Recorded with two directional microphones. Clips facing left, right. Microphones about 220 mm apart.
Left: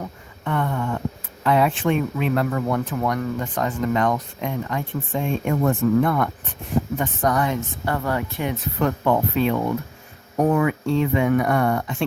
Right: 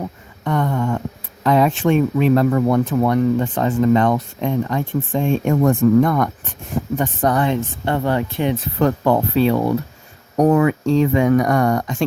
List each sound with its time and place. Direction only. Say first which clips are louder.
0.4 s speech: right 4 dB; 35° right (ahead or behind)